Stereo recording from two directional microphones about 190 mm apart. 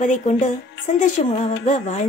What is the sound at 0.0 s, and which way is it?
Speech, 40° left (ahead or behind).